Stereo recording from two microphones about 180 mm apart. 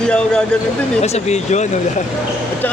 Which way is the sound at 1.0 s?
35° left (ahead or behind).